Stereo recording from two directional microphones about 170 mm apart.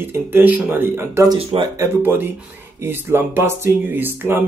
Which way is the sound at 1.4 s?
35° right (ahead or behind).